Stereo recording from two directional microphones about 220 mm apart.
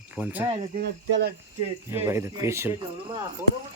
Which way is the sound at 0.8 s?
50° right (ahead or behind).